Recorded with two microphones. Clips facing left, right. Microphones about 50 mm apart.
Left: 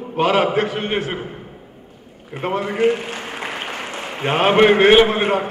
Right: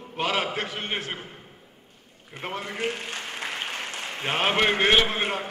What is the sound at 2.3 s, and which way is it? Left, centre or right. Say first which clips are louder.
A man's voice: left 11 dB; centre.